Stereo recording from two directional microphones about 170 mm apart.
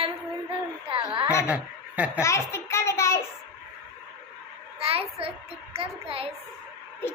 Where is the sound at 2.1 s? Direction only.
15° left (ahead or behind).